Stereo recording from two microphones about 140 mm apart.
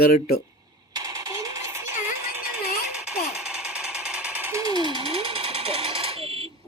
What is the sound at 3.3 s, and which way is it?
Jackhammer, 5° right (ahead or behind).